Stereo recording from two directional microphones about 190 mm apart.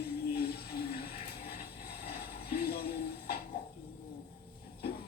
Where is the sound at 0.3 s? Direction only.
55° left (ahead or behind).